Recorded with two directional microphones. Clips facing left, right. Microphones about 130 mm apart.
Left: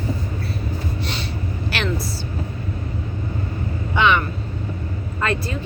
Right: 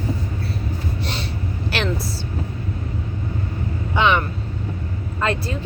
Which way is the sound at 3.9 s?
30° right (ahead or behind).